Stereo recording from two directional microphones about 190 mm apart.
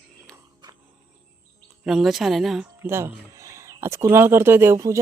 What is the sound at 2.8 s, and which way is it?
Speech, 10° right (ahead or behind).